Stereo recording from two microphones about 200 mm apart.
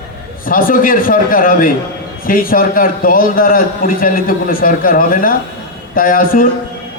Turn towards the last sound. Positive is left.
turn(degrees=45)  # may be behind; listen again after turning